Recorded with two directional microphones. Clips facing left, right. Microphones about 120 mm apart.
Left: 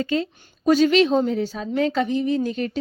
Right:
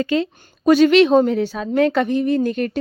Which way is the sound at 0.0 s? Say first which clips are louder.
Right 4 dB; 85° right.